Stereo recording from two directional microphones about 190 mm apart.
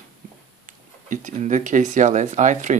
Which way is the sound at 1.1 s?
40° right (ahead or behind).